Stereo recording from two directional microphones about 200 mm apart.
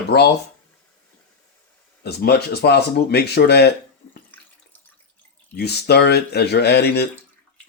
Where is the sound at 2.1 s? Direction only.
55° left (ahead or behind).